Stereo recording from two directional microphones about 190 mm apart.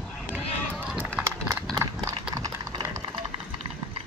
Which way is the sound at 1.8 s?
20° right (ahead or behind).